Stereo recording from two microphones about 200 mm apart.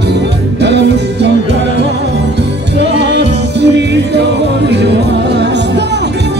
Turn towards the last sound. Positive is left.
turn(degrees=-60)  # may be behind; listen again after turning